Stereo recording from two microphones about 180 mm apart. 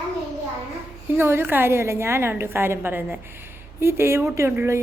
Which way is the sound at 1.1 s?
15° right (ahead or behind).